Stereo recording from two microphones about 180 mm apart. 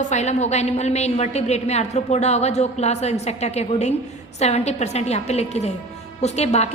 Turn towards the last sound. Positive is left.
turn(degrees=35)  # may be behind; listen again after turning